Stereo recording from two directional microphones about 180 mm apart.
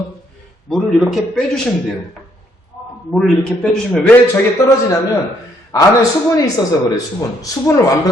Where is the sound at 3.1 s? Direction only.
5° left (ahead or behind).